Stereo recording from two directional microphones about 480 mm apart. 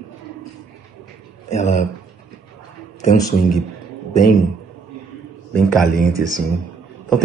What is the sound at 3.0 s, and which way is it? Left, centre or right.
Speech, centre.